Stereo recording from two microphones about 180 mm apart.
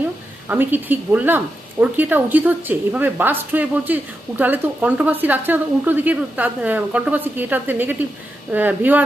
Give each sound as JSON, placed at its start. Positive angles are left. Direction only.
{"t": 0.4, "sound": "a woman's voice", "side_deg": -10}